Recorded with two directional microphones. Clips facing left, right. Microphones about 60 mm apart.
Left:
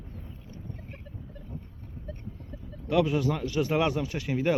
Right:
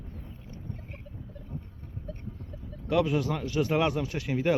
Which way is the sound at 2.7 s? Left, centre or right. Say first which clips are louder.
Left 1 dB; centre.